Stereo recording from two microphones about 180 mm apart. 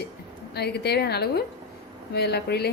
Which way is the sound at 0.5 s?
65° left (ahead or behind).